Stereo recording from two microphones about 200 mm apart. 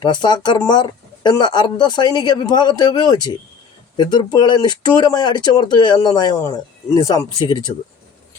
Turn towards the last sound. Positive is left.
turn(degrees=20)  # may be behind; listen again after turning